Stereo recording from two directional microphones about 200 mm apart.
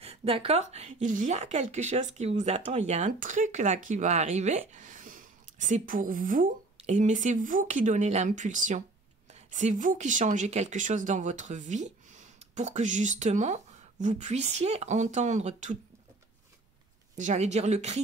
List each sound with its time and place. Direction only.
0.0 s a woman's voice: 30° right (ahead or behind)
17.1 s speech: 35° right (ahead or behind)